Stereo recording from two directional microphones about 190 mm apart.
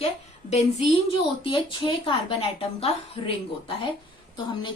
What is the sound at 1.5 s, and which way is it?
A woman's voice, 25° left (ahead or behind).